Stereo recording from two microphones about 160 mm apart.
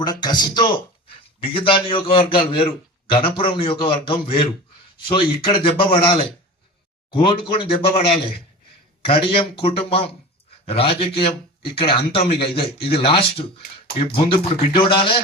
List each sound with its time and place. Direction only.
0.0 s a man's voice: 25° left (ahead or behind)